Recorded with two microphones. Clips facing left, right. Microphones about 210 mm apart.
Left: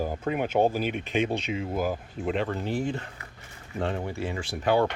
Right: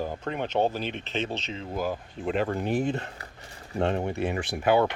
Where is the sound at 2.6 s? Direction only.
20° right (ahead or behind).